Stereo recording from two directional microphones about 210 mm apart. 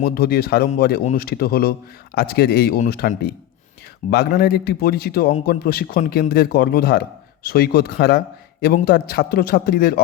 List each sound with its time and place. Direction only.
0.0 s a man's voice: 45° left (ahead or behind)